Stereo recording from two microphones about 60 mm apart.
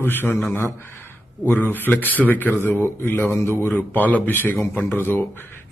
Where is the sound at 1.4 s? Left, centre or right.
Left.